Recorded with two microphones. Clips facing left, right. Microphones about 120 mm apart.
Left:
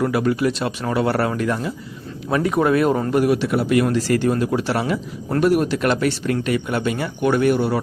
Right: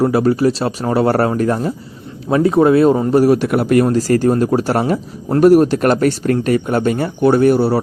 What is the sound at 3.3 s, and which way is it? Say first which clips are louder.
Speech: right 5 dB; 55° right (ahead or behind).